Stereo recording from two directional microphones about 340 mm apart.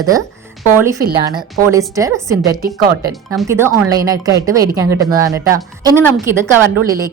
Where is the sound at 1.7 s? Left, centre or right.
Centre.